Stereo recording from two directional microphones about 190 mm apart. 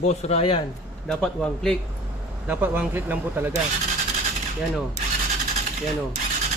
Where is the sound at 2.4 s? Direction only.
10° right (ahead or behind).